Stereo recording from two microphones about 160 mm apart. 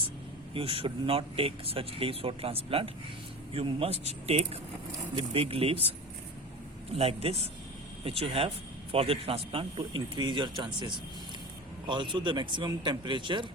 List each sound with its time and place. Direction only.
0.5 s speech: 35° right (ahead or behind)
6.9 s speech: 40° right (ahead or behind)